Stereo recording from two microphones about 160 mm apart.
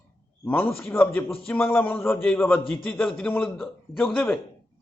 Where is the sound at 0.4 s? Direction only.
10° left (ahead or behind).